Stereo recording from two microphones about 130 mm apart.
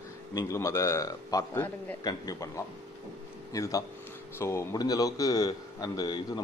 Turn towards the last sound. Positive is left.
turn(degrees=30)  # may be behind; listen again after turning